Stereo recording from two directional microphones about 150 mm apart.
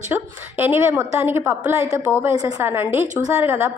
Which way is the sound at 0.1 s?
15° right (ahead or behind).